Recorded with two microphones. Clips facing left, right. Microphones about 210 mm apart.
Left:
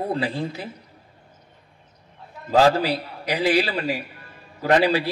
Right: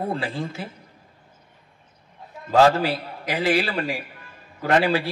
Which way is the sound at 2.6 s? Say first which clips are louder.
Even; 50° right (ahead or behind).